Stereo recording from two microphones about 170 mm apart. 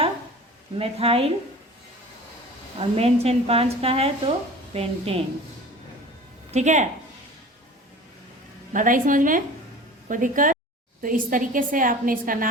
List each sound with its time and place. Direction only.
0.8 s a woman's voice: 35° right (ahead or behind)
2.7 s a woman's voice: 35° right (ahead or behind)
6.5 s a woman's voice: 45° right (ahead or behind)
8.7 s a woman's voice: 50° right (ahead or behind)